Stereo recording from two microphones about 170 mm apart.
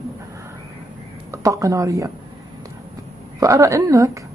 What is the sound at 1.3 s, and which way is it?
Speech, 20° right (ahead or behind).